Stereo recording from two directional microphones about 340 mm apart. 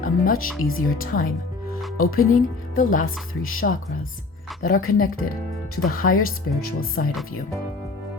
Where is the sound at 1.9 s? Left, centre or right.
Left.